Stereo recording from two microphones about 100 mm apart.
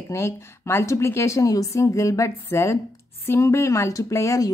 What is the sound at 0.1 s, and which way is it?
A woman's voice, 25° left (ahead or behind).